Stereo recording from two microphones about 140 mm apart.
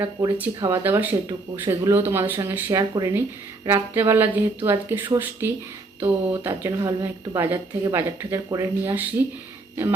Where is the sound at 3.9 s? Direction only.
15° right (ahead or behind).